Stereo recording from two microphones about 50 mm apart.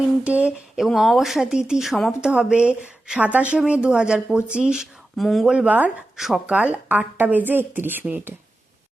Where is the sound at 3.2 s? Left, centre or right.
Right; by 5.0 s centre.